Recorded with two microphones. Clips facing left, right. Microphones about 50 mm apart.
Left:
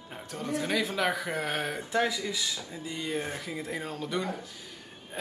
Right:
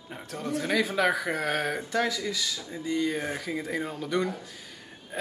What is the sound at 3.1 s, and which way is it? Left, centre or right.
Speech, right.